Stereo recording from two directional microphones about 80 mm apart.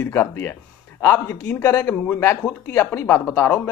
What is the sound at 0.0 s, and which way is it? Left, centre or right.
A man's voice, left.